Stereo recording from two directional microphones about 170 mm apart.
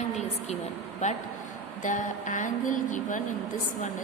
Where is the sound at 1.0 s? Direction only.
45° left (ahead or behind).